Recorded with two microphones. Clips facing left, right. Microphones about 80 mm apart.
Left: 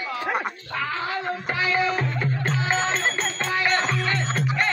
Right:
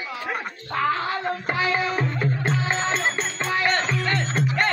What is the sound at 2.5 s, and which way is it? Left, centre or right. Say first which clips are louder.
Music: left 1 dB; centre.